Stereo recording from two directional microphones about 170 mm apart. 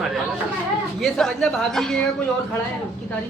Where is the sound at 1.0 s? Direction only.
5° left (ahead or behind).